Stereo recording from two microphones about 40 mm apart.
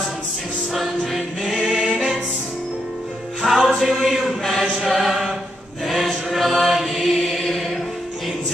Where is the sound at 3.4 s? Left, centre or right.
Centre.